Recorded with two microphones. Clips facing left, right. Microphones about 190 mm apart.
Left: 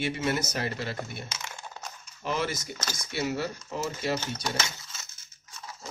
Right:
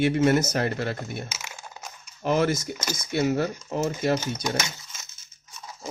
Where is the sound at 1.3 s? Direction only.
5° right (ahead or behind).